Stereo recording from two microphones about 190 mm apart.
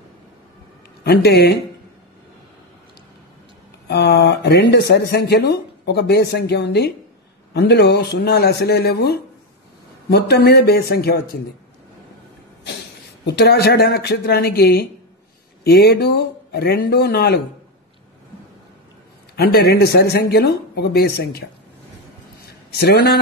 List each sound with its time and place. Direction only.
1.0 s speech: 60° left (ahead or behind)
3.8 s speech: 60° left (ahead or behind)
13.2 s speech: 60° left (ahead or behind)
19.3 s speech: 55° left (ahead or behind)
22.8 s speech: 55° left (ahead or behind)